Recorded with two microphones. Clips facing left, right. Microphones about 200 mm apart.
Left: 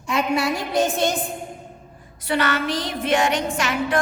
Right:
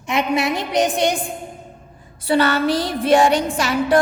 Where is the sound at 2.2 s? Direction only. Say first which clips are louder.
Right 5 dB; 30° right (ahead or behind).